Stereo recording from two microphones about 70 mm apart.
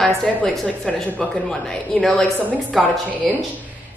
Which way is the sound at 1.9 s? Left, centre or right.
Centre.